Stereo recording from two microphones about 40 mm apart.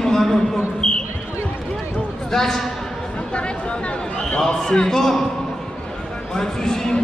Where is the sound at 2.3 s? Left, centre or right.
Centre.